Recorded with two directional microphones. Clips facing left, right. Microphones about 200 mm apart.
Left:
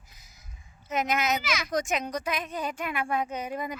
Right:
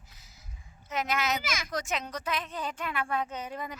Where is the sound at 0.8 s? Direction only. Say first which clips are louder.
Left 3 dB; 20° left (ahead or behind).